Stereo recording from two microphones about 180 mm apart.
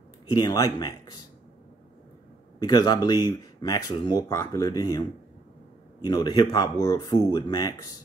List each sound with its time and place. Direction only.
0.3 s speech: 20° left (ahead or behind)
2.6 s speech: 20° left (ahead or behind)
6.0 s speech: 25° left (ahead or behind)